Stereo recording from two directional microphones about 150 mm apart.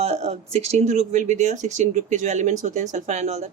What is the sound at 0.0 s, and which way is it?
Speech, 45° right (ahead or behind).